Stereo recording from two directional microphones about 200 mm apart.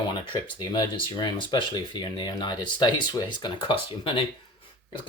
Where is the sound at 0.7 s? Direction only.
20° left (ahead or behind).